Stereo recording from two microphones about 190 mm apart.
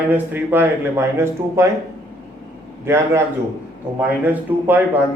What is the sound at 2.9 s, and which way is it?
Speech, 15° right (ahead or behind).